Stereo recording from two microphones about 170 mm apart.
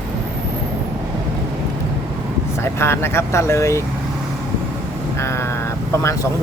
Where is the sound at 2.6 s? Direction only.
15° left (ahead or behind).